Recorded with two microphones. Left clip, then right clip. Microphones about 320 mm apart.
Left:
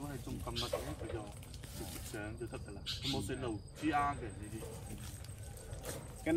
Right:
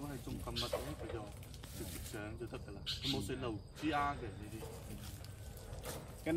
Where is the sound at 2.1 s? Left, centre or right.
Centre.